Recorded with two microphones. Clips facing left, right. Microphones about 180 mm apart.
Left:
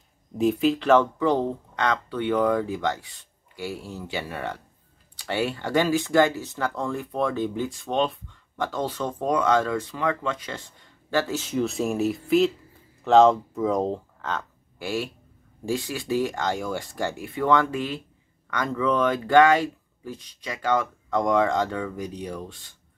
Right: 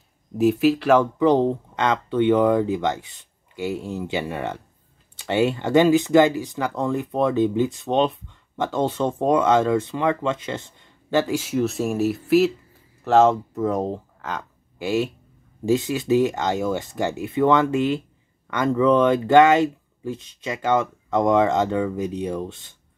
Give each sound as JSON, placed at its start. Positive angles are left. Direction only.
{"t": 0.4, "sound": "speech", "side_deg": -5}
{"t": 1.2, "sound": "speech", "side_deg": -20}